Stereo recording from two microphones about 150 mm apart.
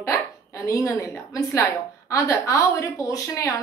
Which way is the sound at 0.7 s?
20° left (ahead or behind).